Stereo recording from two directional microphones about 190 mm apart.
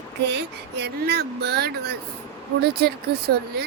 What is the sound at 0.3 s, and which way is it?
Speech, 65° right (ahead or behind).